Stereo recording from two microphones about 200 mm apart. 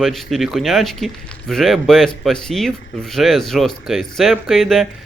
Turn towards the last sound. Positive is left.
turn(degrees=0)  # may be behind; listen again after turning